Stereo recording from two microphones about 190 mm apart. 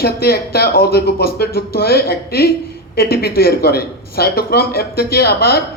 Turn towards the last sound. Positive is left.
turn(degrees=55)  # may be behind; listen again after turning